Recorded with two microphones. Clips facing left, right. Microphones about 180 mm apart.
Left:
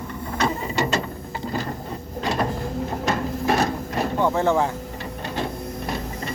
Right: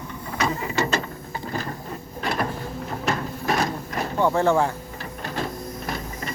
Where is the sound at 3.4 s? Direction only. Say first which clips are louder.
Left 2 dB; 30° left (ahead or behind).